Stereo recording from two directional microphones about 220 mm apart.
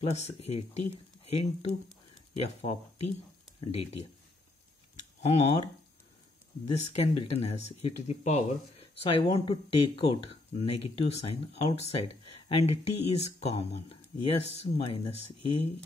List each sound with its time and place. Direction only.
0.0 s speech: 30° left (ahead or behind)
5.2 s speech: 30° left (ahead or behind)
6.7 s speech: 30° left (ahead or behind)